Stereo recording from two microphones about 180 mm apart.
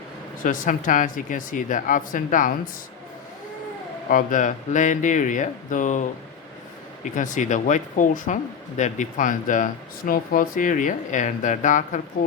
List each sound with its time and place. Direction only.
0.4 s a woman's voice: 50° left (ahead or behind)
4.1 s a woman's voice: 45° left (ahead or behind)
7.2 s a woman's voice: 45° left (ahead or behind)